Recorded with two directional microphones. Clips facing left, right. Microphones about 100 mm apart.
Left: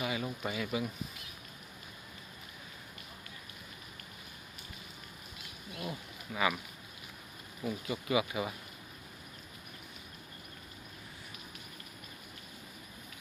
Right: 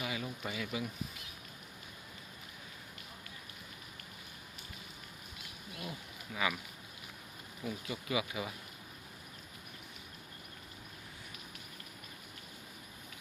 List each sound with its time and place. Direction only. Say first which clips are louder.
0.0 s a sound: left 4 dB; 35° left (ahead or behind)
6.3 s speech: left 4 dB; 40° left (ahead or behind)
7.6 s speech: left 4 dB; 30° left (ahead or behind)
8.2 s speech: left 4 dB; 45° left (ahead or behind)